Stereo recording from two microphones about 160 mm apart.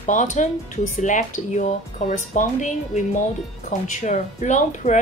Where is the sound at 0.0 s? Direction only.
50° left (ahead or behind).